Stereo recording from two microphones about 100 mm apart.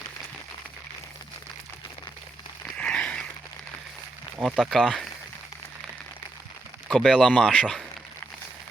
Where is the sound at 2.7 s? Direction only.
10° left (ahead or behind).